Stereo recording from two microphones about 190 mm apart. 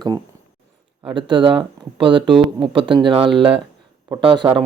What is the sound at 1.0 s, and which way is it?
Speech, 25° right (ahead or behind).